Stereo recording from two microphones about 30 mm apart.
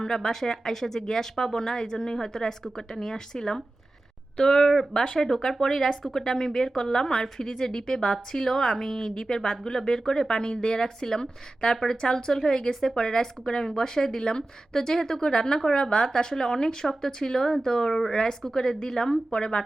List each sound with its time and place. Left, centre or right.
0.0 s a woman's voice: centre
12.3 s speech: centre
12.5 s a woman's voice: left